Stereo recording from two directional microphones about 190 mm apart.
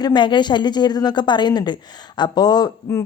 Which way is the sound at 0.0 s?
25° left (ahead or behind).